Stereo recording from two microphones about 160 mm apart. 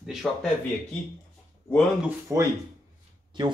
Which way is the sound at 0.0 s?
Centre (ahead or behind).